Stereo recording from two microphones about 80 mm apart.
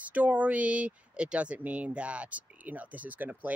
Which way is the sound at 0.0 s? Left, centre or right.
Centre.